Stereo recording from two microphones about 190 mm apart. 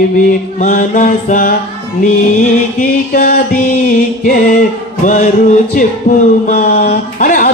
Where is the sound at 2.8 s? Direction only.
45° left (ahead or behind).